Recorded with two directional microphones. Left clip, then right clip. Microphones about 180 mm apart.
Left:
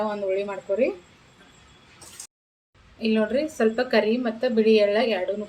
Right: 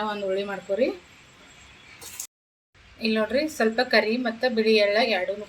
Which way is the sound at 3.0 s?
25° left (ahead or behind).